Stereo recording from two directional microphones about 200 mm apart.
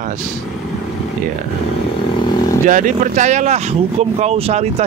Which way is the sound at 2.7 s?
40° right (ahead or behind).